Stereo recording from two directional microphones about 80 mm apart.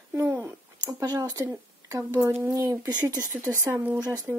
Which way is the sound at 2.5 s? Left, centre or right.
Right.